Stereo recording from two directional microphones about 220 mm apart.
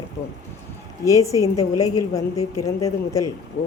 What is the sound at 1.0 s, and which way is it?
A woman's voice, 15° left (ahead or behind).